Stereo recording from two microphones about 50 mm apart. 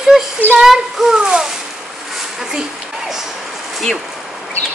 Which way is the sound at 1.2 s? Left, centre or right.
Centre.